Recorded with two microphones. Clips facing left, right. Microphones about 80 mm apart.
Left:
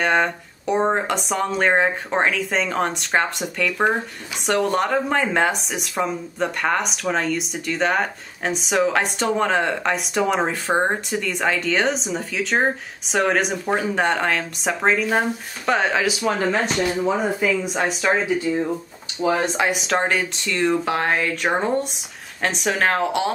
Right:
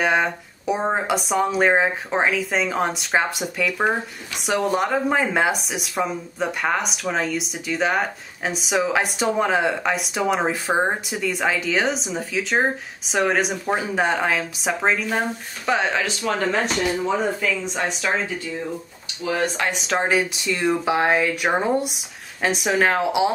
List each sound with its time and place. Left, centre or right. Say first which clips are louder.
0.0 s speech: left 1 dB; centre
19.4 s speech: left 2 dB; centre
19.7 s speech: even; centre